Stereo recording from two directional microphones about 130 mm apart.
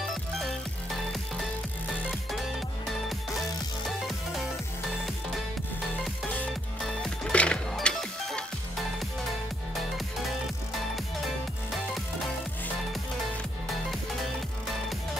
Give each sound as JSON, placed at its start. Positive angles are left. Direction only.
{"t": 6.8, "sound": "music", "side_deg": 5}
{"t": 11.2, "sound": "music", "side_deg": 0}